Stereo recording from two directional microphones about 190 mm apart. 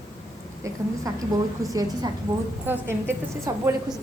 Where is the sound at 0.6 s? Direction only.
20° right (ahead or behind).